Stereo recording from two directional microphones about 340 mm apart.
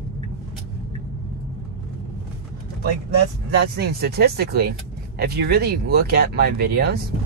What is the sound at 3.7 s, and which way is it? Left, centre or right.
Speech, right.